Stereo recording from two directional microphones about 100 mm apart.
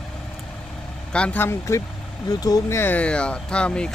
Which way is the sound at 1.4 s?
25° left (ahead or behind).